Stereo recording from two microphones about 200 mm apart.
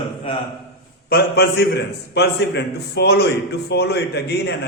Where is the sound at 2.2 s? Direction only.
55° left (ahead or behind).